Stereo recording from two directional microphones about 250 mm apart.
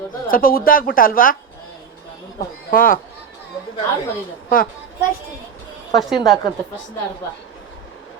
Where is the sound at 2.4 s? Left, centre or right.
Left.